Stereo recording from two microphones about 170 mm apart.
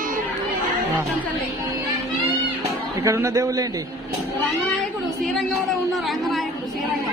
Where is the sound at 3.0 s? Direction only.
20° right (ahead or behind).